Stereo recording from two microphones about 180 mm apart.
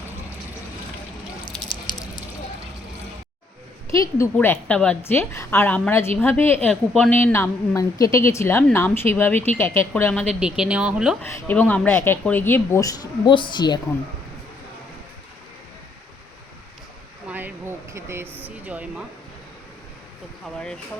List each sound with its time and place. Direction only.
1.5 s drip: 25° left (ahead or behind)
3.9 s a woman's voice: 15° left (ahead or behind); by 11.2 s 5° right (ahead or behind)
11.4 s a woman's voice: 10° left (ahead or behind); by 13.7 s 25° left (ahead or behind)
17.2 s a sound: 10° right (ahead or behind)
18.4 s speech: 10° right (ahead or behind)